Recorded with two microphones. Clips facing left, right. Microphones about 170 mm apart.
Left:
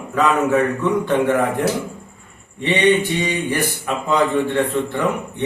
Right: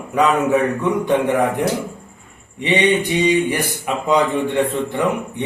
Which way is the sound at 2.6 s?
15° right (ahead or behind).